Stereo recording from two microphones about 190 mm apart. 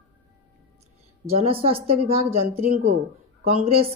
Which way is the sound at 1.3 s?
30° right (ahead or behind).